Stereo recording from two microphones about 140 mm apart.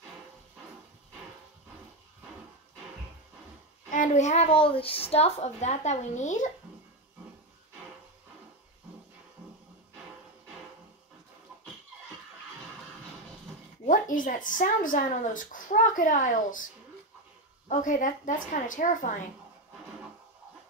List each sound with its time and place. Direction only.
3.9 s a child's voice: 60° left (ahead or behind)
13.8 s a woman's voice: 70° left (ahead or behind)
17.6 s a woman's voice: 65° left (ahead or behind)